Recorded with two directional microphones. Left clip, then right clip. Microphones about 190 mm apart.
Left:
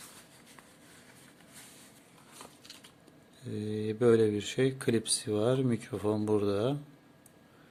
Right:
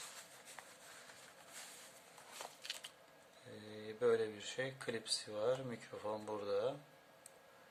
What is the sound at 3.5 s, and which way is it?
Speech, 55° left (ahead or behind).